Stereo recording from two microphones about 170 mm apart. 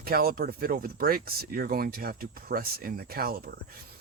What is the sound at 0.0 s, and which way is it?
Speech, 60° right (ahead or behind).